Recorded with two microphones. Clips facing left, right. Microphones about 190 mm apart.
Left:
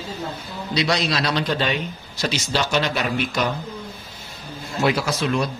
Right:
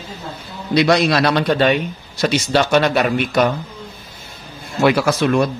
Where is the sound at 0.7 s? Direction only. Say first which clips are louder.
Right 8 dB; 55° right (ahead or behind).